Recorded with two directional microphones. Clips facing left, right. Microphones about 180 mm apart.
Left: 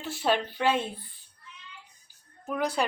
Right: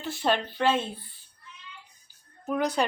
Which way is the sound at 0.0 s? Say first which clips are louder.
Even; 5° left (ahead or behind).